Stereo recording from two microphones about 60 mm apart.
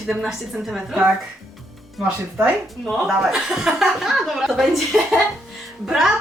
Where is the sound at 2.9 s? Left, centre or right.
Centre.